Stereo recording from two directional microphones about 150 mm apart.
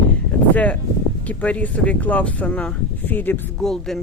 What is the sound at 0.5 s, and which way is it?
Speech, 10° left (ahead or behind).